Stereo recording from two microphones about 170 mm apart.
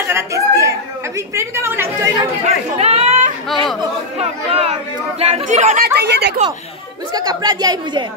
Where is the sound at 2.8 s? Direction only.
40° right (ahead or behind).